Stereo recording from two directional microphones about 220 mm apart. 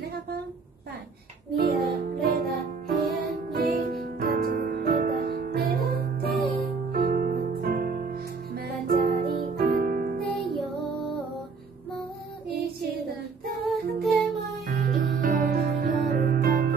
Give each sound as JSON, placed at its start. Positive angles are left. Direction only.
{"t": 1.6, "sound": "music", "side_deg": -45}
{"t": 10.5, "sound": "music", "side_deg": 0}
{"t": 13.8, "sound": "music", "side_deg": -45}